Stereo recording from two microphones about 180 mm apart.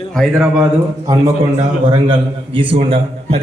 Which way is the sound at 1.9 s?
25° right (ahead or behind).